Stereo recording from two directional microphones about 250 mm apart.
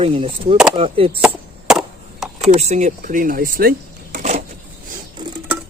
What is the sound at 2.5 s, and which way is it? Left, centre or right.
Speech, right.